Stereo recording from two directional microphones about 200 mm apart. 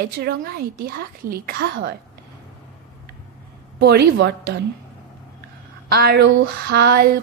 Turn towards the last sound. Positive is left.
turn(degrees=-55)  # may be behind; listen again after turning